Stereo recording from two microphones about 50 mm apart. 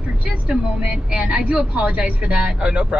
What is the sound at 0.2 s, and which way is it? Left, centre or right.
A woman's voice, right.